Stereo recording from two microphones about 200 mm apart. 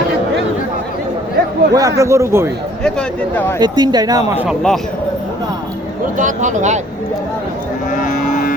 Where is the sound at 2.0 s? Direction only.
15° right (ahead or behind).